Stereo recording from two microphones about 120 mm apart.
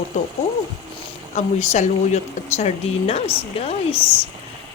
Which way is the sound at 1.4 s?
70° left (ahead or behind).